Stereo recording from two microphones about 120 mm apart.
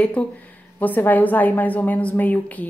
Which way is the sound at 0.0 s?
10° left (ahead or behind).